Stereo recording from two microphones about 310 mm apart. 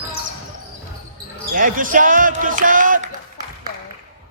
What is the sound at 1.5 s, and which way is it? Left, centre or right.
Speech, right.